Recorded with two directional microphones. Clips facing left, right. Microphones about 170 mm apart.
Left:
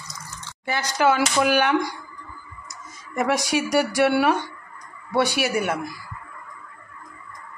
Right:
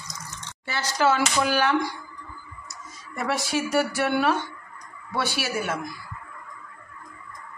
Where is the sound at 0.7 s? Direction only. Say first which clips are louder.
Left 2 dB; 15° left (ahead or behind).